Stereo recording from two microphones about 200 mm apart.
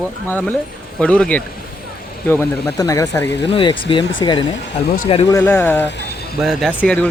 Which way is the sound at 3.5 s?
25° left (ahead or behind).